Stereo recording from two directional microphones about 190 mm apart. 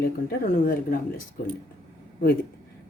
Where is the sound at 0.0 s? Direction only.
50° left (ahead or behind).